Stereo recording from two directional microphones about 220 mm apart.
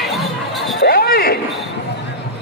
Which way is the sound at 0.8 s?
45° left (ahead or behind).